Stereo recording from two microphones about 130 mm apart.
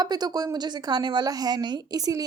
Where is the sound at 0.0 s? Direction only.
30° right (ahead or behind).